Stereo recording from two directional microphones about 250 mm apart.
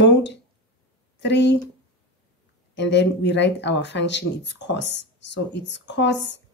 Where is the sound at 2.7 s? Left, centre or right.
Left.